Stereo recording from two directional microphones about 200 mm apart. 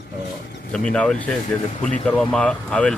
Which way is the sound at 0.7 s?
5° left (ahead or behind).